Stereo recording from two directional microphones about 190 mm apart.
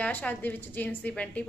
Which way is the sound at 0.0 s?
10° left (ahead or behind).